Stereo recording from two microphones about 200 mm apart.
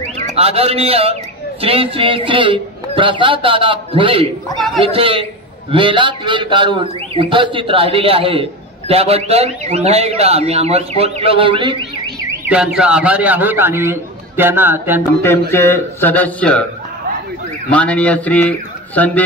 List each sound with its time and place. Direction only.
0.4 s a man's voice: 30° right (ahead or behind)
4.6 s a man's voice: centre (ahead or behind)
4.8 s a man's voice: 25° right (ahead or behind)
12.4 s a man's voice: 5° right (ahead or behind)
15.5 s a man's voice: 10° left (ahead or behind)
17.6 s a man's voice: 5° left (ahead or behind)